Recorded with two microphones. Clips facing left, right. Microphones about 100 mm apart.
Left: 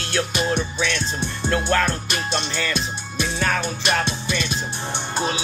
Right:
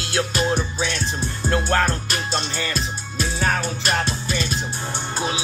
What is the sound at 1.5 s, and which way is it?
Music, 30° right (ahead or behind).